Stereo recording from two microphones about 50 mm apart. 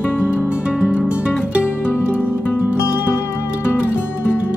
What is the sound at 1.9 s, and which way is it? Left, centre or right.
Music, left.